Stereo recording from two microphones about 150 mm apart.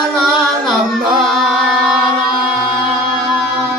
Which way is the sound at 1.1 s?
5° right (ahead or behind).